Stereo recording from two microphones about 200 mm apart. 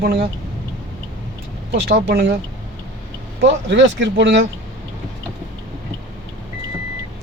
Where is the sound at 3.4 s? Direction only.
60° right (ahead or behind).